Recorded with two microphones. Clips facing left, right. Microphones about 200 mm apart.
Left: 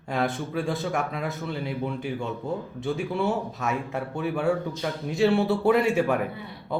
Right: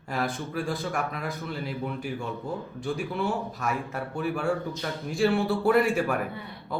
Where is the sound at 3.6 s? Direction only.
20° left (ahead or behind).